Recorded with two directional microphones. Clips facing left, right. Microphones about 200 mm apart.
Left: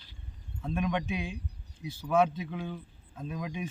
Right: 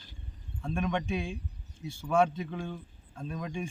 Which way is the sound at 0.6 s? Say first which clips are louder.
Even; 5° left (ahead or behind).